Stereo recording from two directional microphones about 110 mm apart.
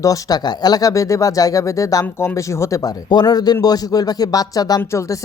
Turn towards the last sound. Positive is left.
turn(degrees=25)  # may be behind; listen again after turning